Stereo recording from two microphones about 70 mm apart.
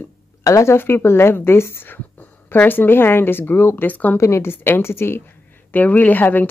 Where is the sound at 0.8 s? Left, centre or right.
Left.